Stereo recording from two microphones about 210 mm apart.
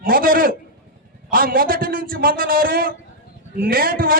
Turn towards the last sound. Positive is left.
turn(degrees=-45)  # may be behind; listen again after turning